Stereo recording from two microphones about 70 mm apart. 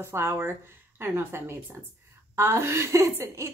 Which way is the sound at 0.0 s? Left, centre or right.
Right.